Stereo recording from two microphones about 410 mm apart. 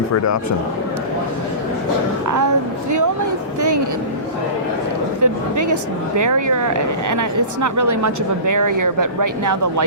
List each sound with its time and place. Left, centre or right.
2.2 s speech: right
5.2 s speech: right